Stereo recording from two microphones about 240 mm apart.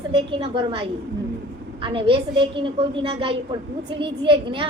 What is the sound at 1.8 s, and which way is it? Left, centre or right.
A woman's voice, right.